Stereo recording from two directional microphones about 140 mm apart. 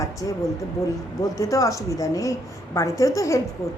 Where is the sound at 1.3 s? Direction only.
25° left (ahead or behind).